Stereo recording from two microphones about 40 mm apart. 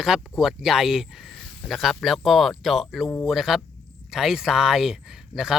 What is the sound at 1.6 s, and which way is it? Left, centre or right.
Speech, centre.